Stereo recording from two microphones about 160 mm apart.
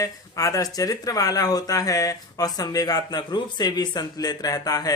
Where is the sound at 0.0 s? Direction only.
20° left (ahead or behind).